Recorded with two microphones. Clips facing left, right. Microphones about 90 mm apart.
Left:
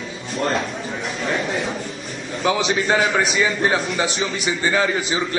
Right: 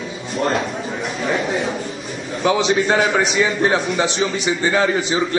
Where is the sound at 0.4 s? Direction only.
Centre (ahead or behind).